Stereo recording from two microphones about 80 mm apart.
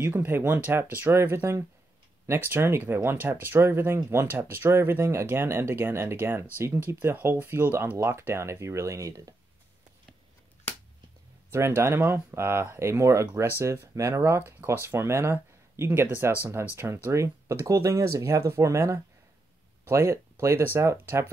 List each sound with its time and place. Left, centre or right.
0.0 s speech: right
8.0 s speech: right
11.5 s speech: right